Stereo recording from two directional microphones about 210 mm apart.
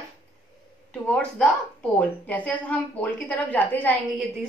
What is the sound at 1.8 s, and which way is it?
A woman's voice, 5° left (ahead or behind).